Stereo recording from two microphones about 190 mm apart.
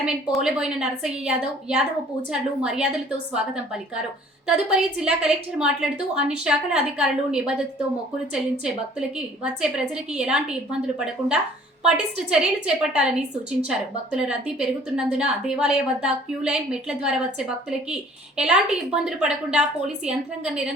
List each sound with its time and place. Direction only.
0.0 s a woman's voice: 5° right (ahead or behind)
4.7 s a woman's voice: 5° right (ahead or behind)